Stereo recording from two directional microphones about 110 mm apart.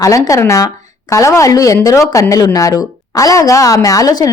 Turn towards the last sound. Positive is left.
turn(degrees=35)  # may be behind; listen again after turning